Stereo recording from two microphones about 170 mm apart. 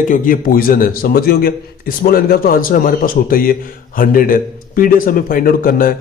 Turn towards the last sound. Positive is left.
turn(degrees=60)  # may be behind; listen again after turning